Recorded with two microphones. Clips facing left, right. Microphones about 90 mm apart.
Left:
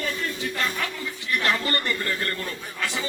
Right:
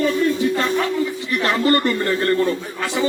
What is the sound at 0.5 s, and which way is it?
A man's voice, 25° right (ahead or behind).